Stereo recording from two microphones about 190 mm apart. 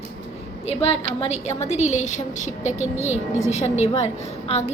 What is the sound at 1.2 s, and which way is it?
A woman's voice, 35° left (ahead or behind).